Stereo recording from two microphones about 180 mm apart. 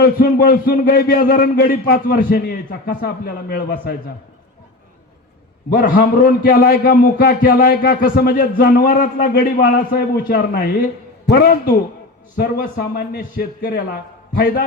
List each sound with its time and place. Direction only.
0.0 s a man's voice: 60° left (ahead or behind)
5.7 s a man's voice: 55° left (ahead or behind)